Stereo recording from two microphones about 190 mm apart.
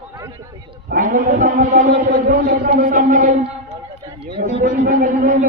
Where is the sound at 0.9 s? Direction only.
45° right (ahead or behind).